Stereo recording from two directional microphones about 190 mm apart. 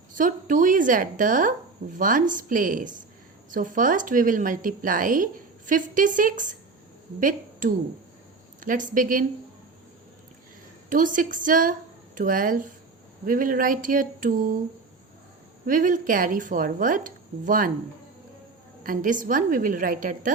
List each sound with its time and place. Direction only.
0.1 s a woman's voice: 45° right (ahead or behind)
10.8 s a woman's voice: 45° right (ahead or behind)
15.6 s a woman's voice: 45° right (ahead or behind)
18.8 s a woman's voice: 45° right (ahead or behind)